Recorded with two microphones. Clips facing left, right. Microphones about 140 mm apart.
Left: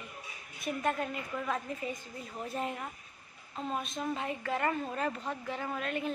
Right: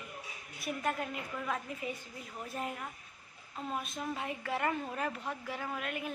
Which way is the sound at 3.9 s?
10° right (ahead or behind).